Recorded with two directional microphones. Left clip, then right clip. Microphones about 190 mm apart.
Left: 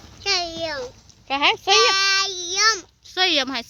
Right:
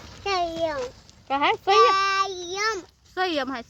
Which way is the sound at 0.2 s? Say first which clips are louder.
Left 1 dB; 15° right (ahead or behind).